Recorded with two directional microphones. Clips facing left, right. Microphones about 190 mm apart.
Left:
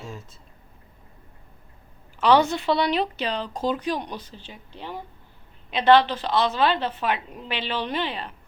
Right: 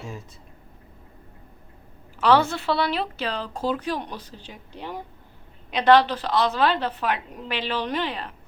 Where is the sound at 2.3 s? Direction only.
15° left (ahead or behind).